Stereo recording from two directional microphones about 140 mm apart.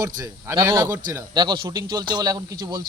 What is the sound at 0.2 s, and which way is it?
Speech, 20° right (ahead or behind).